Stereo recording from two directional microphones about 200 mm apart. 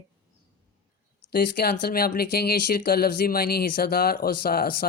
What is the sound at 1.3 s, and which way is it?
Speech, 50° left (ahead or behind).